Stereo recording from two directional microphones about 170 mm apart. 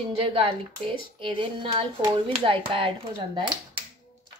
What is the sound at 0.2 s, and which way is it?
Speech, 35° right (ahead or behind).